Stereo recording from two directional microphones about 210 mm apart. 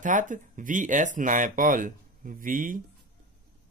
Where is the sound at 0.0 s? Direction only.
40° right (ahead or behind).